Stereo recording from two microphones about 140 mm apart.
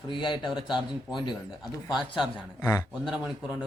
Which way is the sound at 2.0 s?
5° right (ahead or behind).